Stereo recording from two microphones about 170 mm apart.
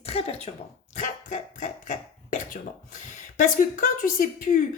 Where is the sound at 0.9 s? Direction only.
50° left (ahead or behind).